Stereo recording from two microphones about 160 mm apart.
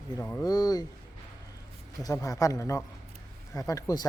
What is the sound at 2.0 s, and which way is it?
Speech, 20° left (ahead or behind).